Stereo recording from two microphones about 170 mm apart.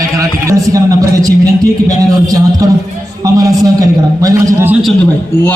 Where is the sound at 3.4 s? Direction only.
20° right (ahead or behind).